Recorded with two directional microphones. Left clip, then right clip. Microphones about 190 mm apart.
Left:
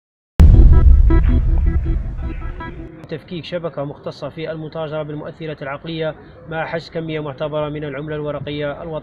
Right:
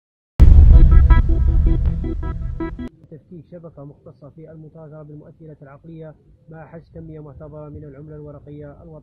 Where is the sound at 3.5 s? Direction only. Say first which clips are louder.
Left 16 dB; 20° left (ahead or behind).